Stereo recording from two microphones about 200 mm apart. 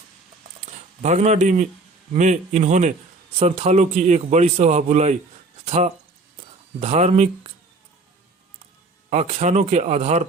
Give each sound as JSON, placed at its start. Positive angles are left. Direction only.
{"t": 0.6, "sound": "speech", "side_deg": -35}
{"t": 9.0, "sound": "speech", "side_deg": -35}